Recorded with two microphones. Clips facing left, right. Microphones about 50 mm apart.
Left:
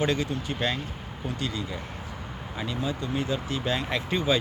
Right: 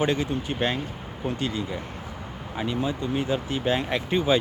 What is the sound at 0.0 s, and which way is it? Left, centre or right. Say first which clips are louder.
Speech: right 2 dB; right.